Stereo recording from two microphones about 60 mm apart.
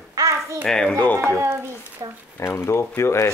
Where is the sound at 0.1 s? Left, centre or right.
Right.